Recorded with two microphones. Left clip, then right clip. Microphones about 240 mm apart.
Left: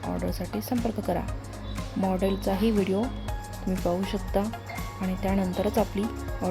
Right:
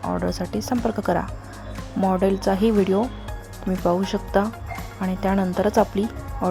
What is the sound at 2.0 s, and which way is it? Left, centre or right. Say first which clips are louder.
A woman's voice: right 7 dB; centre.